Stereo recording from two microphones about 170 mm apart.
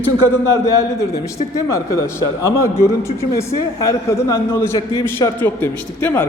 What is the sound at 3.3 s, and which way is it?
A man's voice, 20° left (ahead or behind).